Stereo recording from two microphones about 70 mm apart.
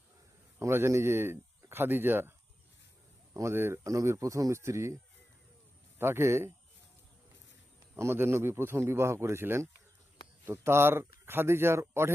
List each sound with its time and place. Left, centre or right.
0.6 s speech: right
3.5 s speech: right
3.8 s speech: right
6.0 s speech: right
7.9 s speech: right